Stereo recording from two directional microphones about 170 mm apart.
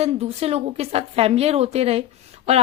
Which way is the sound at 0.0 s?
35° right (ahead or behind).